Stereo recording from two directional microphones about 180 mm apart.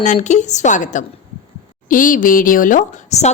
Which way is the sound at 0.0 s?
40° left (ahead or behind).